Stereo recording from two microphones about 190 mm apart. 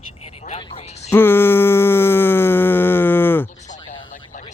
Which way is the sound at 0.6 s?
30° left (ahead or behind).